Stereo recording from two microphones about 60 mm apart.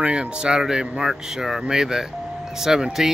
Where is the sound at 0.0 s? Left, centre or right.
Centre.